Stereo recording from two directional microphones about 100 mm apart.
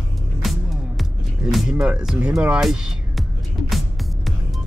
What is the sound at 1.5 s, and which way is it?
Speech, 5° right (ahead or behind).